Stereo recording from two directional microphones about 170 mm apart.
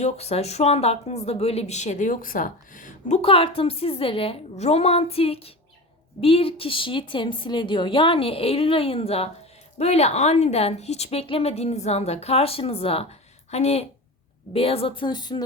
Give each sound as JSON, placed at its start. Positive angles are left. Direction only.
{"t": 0.0, "sound": "a woman's voice", "side_deg": 40}
{"t": 3.2, "sound": "a woman's voice", "side_deg": 35}